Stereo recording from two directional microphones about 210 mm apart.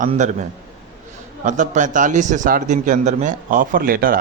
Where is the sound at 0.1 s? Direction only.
35° right (ahead or behind).